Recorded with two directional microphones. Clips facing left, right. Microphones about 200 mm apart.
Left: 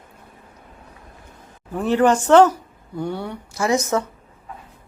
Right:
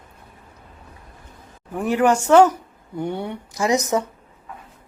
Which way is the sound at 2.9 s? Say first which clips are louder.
Right 1 dB; 20° right (ahead or behind).